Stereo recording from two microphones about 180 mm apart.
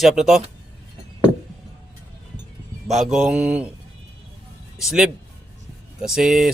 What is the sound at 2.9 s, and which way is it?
Speech, centre (ahead or behind).